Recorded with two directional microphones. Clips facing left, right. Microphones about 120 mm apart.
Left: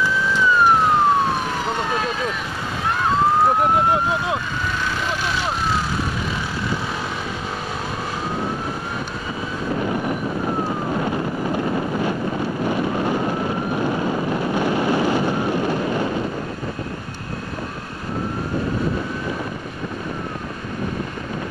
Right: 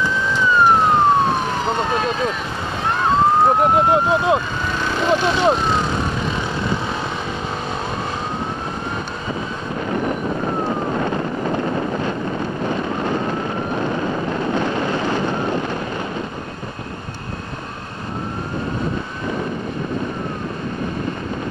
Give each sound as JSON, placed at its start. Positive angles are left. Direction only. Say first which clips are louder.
{"t": 0.0, "sound": "emergency vehicle", "louder": "even", "side_deg": 5}
{"t": 3.0, "sound": "police car", "louder": "right 2 dB", "side_deg": 5}
{"t": 3.4, "sound": "speech", "louder": "right 2 dB", "side_deg": -25}
{"t": 4.8, "sound": "vehicle", "louder": "right 7 dB", "side_deg": -25}
{"t": 5.6, "sound": "speech", "louder": "right 3 dB", "side_deg": 5}